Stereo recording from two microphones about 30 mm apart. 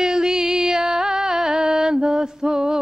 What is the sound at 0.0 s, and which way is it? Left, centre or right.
Music, centre.